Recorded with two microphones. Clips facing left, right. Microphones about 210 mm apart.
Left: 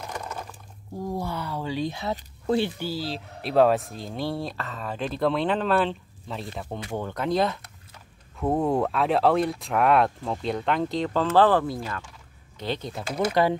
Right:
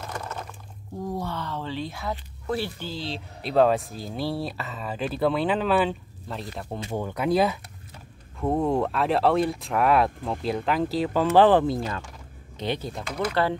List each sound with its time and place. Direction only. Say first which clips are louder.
0.0 s a sound: even; 15° left (ahead or behind)
1.1 s speech: left 1 dB; 10° left (ahead or behind)
2.8 s speech: left 3 dB; 5° left (ahead or behind)
8.4 s speech: even; 5° left (ahead or behind)
11.2 s speech: right 3 dB; 15° right (ahead or behind)
13.0 s speech: left 4 dB; 30° left (ahead or behind)
13.3 s speech: left 3 dB; 15° left (ahead or behind)